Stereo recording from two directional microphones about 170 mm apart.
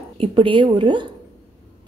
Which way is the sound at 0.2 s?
30° right (ahead or behind).